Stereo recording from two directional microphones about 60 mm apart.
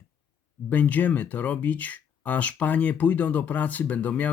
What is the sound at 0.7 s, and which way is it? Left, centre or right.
Speech, left.